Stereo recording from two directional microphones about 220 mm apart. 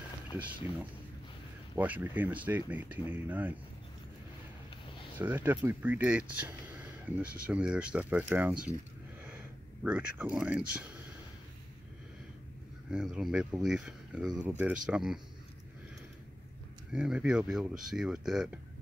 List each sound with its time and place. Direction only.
0.3 s speech: 10° right (ahead or behind)
1.8 s speech: 10° right (ahead or behind)
5.1 s speech: 10° right (ahead or behind)
9.2 s a sound: 10° right (ahead or behind)
12.9 s speech: 5° right (ahead or behind)
16.9 s speech: 5° right (ahead or behind)